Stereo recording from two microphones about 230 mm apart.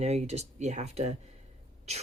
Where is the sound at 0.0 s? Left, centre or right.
Right.